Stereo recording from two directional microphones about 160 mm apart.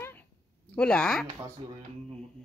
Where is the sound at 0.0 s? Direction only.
10° left (ahead or behind).